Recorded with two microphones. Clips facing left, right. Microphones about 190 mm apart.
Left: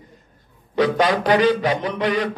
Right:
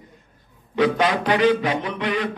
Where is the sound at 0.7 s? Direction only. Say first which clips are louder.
Left 1 dB; 40° left (ahead or behind).